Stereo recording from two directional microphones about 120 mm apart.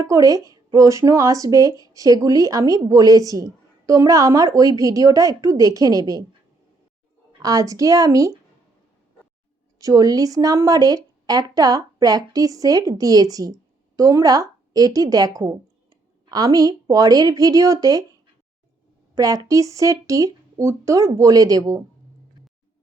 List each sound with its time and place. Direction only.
0.0 s a woman's voice: 30° right (ahead or behind)
7.4 s a woman's voice: 30° right (ahead or behind)
9.7 s speech: 30° right (ahead or behind)
19.1 s a woman's voice: 30° right (ahead or behind)